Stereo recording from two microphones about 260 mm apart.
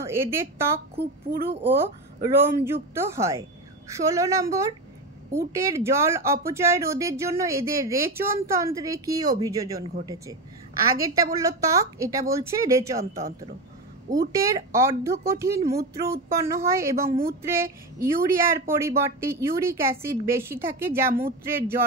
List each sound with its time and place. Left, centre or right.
0.0 s a woman's voice: centre
0.9 s speech: right
2.2 s speech: centre
11.3 s speech: centre
17.1 s speech: right
17.4 s speech: centre